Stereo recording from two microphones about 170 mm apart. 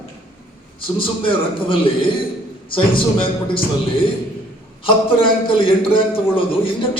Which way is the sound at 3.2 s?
30° left (ahead or behind).